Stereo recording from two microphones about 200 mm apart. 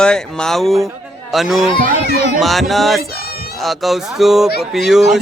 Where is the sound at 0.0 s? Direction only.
5° left (ahead or behind).